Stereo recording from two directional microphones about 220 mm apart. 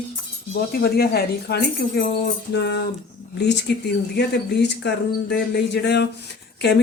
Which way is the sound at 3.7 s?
50° left (ahead or behind).